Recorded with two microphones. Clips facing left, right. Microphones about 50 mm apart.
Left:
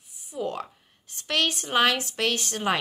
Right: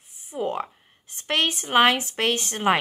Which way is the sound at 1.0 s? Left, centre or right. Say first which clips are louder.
Right 2 dB; right.